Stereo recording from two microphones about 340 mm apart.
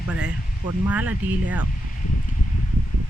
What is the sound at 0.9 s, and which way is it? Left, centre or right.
Speech, centre.